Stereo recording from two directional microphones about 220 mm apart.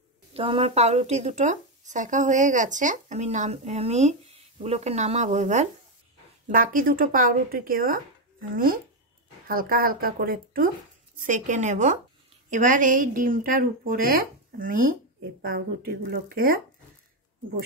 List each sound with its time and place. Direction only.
0.3 s speech: 25° right (ahead or behind); by 16.5 s 40° right (ahead or behind)